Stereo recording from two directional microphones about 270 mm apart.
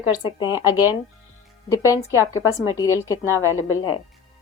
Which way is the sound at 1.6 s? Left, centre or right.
Centre.